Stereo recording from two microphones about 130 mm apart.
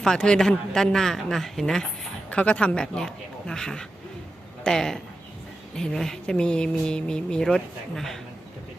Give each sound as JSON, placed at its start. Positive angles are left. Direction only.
{"t": 0.0, "sound": "speech", "side_deg": 5}